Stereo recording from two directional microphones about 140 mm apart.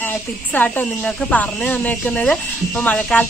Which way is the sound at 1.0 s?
10° left (ahead or behind).